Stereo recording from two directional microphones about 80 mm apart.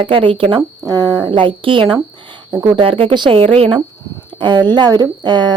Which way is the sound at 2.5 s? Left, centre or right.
Right.